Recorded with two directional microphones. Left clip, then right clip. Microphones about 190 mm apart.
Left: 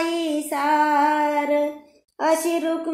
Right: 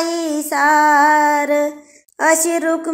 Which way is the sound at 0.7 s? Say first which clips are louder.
Right 7 dB; 35° right (ahead or behind).